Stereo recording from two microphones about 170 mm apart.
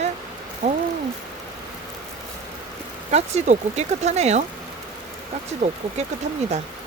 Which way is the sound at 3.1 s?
40° right (ahead or behind).